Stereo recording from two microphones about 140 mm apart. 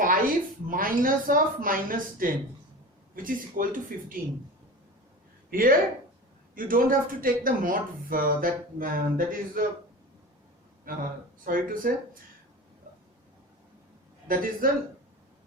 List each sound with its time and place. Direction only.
0.0 s speech: 90° right
5.5 s speech: 90° right
10.9 s speech: 90° right
14.3 s speech: 90° right